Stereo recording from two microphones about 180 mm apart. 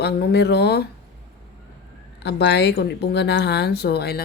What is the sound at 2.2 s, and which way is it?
A woman's voice, 70° left (ahead or behind).